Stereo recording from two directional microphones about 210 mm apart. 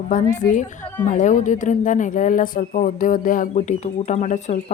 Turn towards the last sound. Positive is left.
turn(degrees=40)  # may be behind; listen again after turning